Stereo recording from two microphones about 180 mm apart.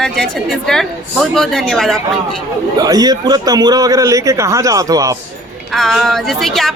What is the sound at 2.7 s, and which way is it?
A man's voice, 20° right (ahead or behind).